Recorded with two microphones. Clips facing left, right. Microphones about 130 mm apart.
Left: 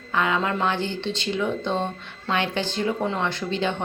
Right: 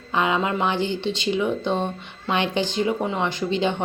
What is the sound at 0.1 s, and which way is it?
A woman's voice, 20° right (ahead or behind).